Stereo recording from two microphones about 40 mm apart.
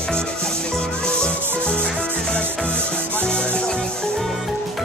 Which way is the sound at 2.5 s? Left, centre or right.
Left.